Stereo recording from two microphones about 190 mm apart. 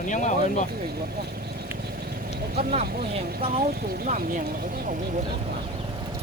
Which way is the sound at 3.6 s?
45° right (ahead or behind).